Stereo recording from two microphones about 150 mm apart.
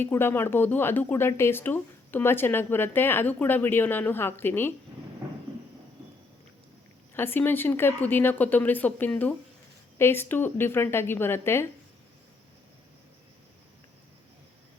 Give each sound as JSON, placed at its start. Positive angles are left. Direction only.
{"t": 0.0, "sound": "speech", "side_deg": 15}
{"t": 7.1, "sound": "speech", "side_deg": 15}